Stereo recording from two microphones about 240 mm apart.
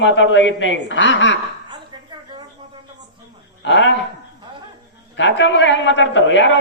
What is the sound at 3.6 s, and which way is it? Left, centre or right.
Speech, left.